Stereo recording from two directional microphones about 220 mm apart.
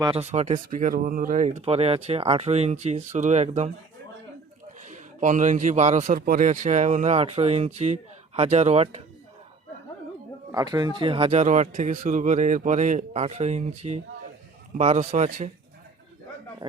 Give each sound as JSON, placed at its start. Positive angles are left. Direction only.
{"t": 0.0, "sound": "a man's voice", "side_deg": -25}
{"t": 4.9, "sound": "a man's voice", "side_deg": -35}
{"t": 10.5, "sound": "a man's voice", "side_deg": -15}